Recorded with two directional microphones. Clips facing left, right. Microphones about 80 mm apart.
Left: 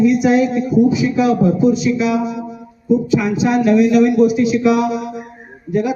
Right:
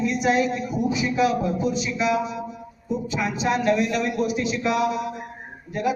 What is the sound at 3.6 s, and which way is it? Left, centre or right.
Speech, centre.